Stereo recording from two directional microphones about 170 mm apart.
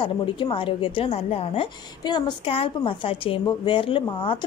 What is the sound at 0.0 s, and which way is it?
A woman's voice, 30° left (ahead or behind).